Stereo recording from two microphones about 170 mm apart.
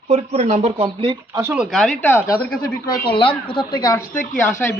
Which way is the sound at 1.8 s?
10° left (ahead or behind).